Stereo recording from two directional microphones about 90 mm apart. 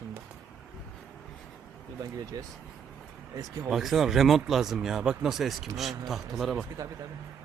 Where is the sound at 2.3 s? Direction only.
40° right (ahead or behind).